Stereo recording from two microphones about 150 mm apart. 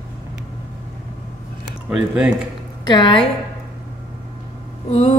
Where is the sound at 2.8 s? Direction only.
30° left (ahead or behind).